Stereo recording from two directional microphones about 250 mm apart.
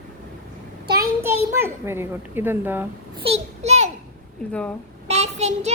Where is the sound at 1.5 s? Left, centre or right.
Centre.